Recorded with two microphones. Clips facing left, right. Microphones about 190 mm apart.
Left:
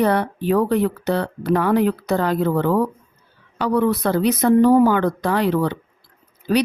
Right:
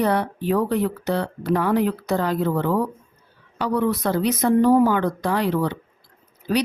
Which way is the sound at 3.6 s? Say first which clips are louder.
Left 3 dB; 65° left (ahead or behind).